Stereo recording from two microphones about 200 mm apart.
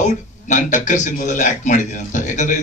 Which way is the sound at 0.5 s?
40° left (ahead or behind).